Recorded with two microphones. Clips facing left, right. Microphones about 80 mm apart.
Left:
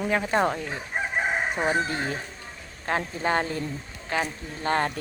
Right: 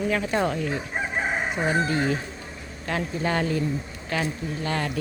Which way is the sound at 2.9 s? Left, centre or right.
Left.